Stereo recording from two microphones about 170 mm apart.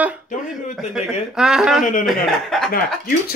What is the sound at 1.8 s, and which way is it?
Speech, 50° left (ahead or behind).